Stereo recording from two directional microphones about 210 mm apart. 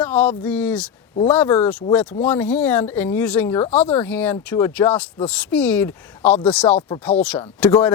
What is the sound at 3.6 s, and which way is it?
Speech, 30° left (ahead or behind).